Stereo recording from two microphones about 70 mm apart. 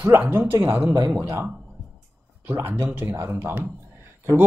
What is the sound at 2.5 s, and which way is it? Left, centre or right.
Speech, right.